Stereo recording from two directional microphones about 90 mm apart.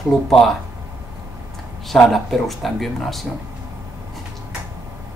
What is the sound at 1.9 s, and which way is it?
Speech, centre (ahead or behind).